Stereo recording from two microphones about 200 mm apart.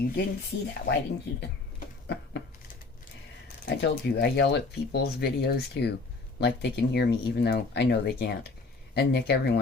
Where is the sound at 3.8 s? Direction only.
55° left (ahead or behind).